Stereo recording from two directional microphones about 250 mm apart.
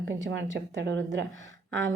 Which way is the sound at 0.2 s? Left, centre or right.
Right.